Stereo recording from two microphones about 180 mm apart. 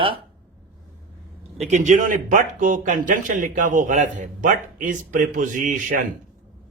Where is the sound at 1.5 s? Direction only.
40° right (ahead or behind).